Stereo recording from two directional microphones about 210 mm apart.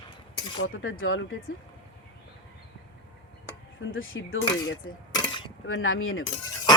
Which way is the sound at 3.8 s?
70° left (ahead or behind).